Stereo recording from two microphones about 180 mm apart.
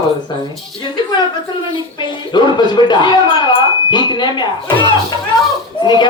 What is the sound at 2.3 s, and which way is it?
Speech, 25° left (ahead or behind).